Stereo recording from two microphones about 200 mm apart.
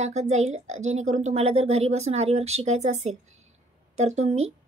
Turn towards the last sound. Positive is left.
turn(degrees=-30)  # may be behind; listen again after turning